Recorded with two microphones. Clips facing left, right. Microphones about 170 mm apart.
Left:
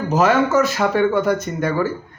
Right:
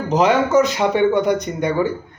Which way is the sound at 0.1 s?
15° right (ahead or behind).